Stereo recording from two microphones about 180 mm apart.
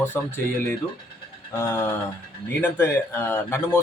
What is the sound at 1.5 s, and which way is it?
Speech, 15° left (ahead or behind).